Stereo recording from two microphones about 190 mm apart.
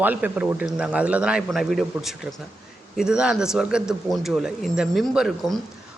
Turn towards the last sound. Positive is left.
turn(degrees=0)  # may be behind; listen again after turning